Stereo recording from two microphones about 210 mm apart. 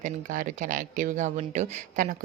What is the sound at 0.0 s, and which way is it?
Speech, 40° right (ahead or behind).